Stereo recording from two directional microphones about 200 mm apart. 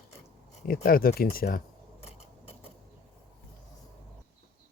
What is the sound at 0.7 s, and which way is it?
Speech, 45° left (ahead or behind).